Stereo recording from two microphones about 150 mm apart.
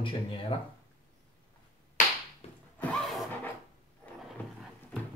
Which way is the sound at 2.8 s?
10° left (ahead or behind).